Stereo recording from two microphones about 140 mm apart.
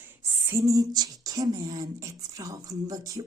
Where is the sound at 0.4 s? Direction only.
20° right (ahead or behind).